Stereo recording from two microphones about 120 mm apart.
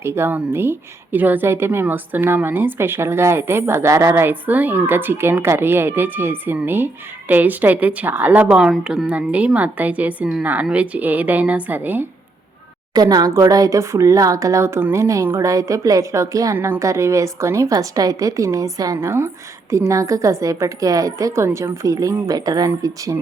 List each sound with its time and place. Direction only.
0.0 s speech: 20° right (ahead or behind)
12.9 s speech: 35° right (ahead or behind)